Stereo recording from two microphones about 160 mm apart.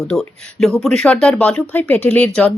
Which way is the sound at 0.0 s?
5° left (ahead or behind).